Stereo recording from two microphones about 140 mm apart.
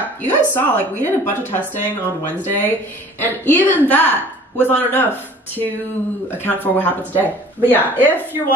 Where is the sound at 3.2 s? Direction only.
15° left (ahead or behind).